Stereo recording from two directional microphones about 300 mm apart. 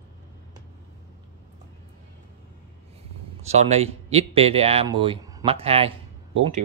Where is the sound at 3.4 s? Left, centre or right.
Right.